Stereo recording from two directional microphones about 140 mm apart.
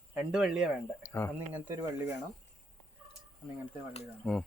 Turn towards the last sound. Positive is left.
turn(degrees=5)  # may be behind; listen again after turning